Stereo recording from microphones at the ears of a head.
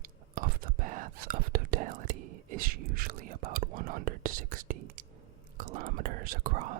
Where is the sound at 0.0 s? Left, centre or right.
Right.